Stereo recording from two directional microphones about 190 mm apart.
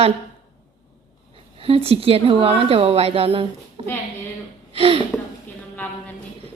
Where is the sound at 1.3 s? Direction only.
30° right (ahead or behind).